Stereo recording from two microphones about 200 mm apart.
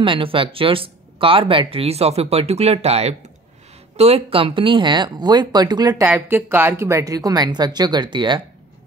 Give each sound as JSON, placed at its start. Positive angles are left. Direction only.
{"t": 0.0, "sound": "speech", "side_deg": -25}